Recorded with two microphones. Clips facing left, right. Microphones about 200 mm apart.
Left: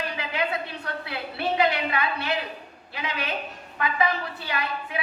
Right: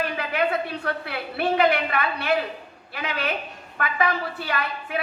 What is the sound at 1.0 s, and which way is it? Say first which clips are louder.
A woman's voice: even; 55° right (ahead or behind).